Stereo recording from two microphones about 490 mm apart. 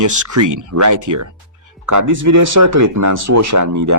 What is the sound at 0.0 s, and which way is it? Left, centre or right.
Speech, right.